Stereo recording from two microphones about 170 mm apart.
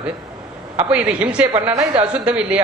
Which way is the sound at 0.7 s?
10° right (ahead or behind).